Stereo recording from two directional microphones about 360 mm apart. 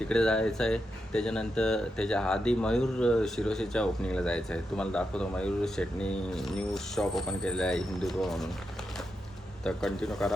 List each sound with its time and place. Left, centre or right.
0.0 s speech: centre
9.6 s speech: centre